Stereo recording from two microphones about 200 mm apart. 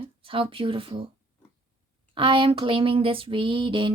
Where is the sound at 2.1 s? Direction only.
25° right (ahead or behind).